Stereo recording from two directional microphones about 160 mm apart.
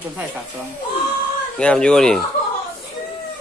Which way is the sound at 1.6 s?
5° left (ahead or behind).